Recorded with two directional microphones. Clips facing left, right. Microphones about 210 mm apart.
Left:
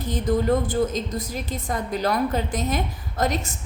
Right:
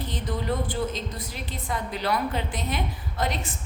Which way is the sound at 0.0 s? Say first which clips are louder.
Left 8 dB; 45° left (ahead or behind).